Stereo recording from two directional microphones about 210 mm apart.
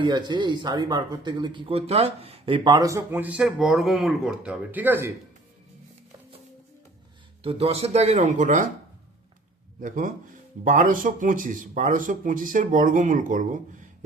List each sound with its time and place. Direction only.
0.0 s speech: 20° right (ahead or behind)
7.4 s speech: 30° right (ahead or behind)
9.8 s speech: 40° right (ahead or behind)